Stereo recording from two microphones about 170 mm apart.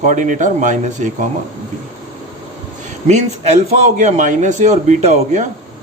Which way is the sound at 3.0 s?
40° right (ahead or behind).